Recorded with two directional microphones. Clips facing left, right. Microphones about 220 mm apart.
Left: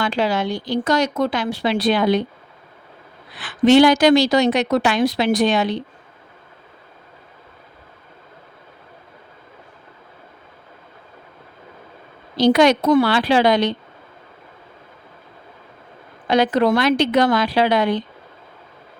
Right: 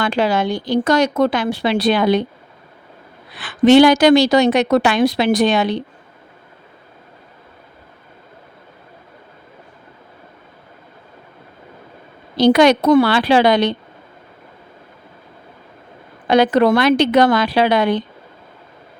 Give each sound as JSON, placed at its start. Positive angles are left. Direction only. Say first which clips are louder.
{"t": 0.0, "sound": "speech", "louder": "right 3 dB", "side_deg": -50}
{"t": 3.3, "sound": "a woman's voice", "louder": "right 3 dB", "side_deg": -70}
{"t": 12.4, "sound": "a woman's voice", "louder": "right 3 dB", "side_deg": -70}
{"t": 16.2, "sound": "a woman's voice", "louder": "right 3 dB", "side_deg": -60}